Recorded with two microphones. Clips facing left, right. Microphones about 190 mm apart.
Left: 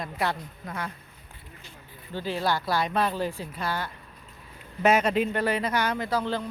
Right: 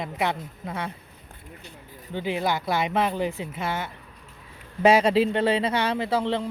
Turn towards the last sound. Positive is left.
turn(degrees=-25)  # may be behind; listen again after turning